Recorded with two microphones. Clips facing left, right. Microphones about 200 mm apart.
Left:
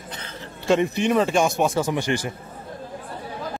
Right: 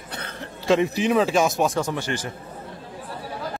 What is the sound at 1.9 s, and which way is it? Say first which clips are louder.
Speech: left 4 dB; 15° left (ahead or behind).